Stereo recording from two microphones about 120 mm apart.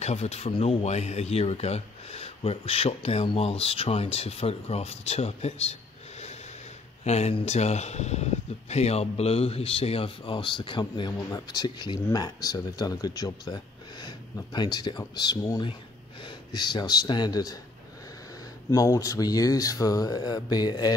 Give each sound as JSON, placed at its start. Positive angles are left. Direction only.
{"t": 0.0, "sound": "speech", "side_deg": 65}
{"t": 7.1, "sound": "speech", "side_deg": 65}
{"t": 18.7, "sound": "speech", "side_deg": 25}